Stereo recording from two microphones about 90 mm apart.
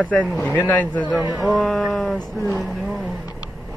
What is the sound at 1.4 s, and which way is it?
Speech, centre (ahead or behind).